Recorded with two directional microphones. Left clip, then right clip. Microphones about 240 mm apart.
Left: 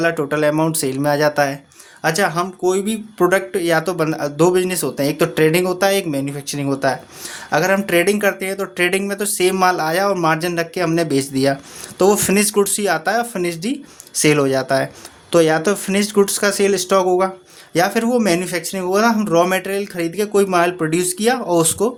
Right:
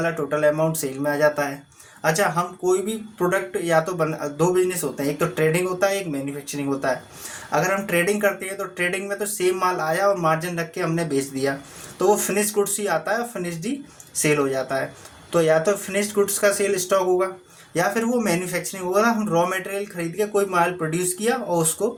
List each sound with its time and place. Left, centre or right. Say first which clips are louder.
0.0 s speech: left 4 dB; left